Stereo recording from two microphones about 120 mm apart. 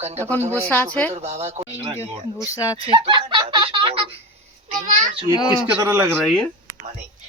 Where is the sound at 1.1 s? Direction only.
65° right (ahead or behind).